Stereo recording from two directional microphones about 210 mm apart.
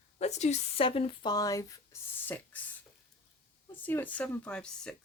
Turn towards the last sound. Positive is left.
turn(degrees=5)  # may be behind; listen again after turning